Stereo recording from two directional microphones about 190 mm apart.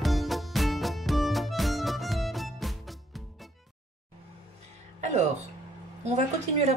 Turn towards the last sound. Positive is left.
turn(degrees=-35)  # may be behind; listen again after turning